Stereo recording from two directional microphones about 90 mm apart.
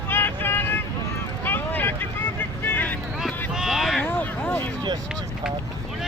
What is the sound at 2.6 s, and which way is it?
Vehicle, 20° left (ahead or behind).